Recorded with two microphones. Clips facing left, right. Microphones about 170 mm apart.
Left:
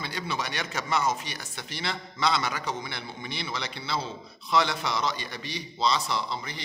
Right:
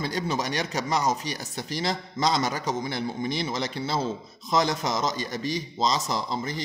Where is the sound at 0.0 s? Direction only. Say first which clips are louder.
Right 5 dB; 40° right (ahead or behind).